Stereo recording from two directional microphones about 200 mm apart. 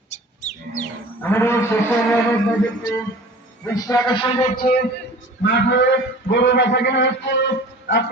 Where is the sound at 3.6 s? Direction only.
15° left (ahead or behind).